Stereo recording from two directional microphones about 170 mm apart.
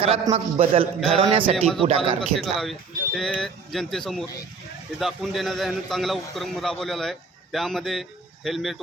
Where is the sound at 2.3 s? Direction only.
Centre (ahead or behind).